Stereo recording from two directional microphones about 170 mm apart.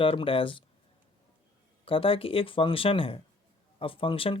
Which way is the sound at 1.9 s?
30° left (ahead or behind).